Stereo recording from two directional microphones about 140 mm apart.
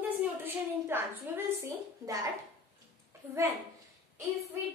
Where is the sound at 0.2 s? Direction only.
15° right (ahead or behind).